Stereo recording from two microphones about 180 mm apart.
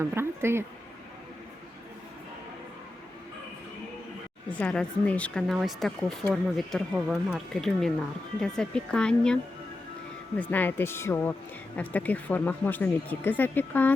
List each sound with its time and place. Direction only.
0.0 s speech: 15° right (ahead or behind)
4.6 s speech: 5° left (ahead or behind)